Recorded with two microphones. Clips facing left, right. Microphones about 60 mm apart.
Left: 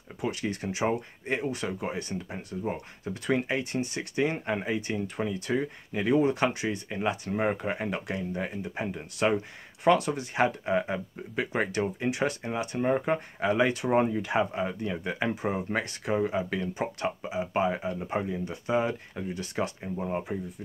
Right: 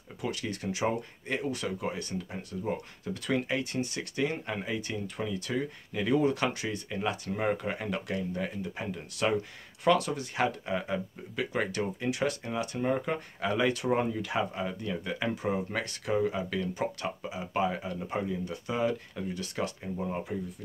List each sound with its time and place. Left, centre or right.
0.2 s speech: left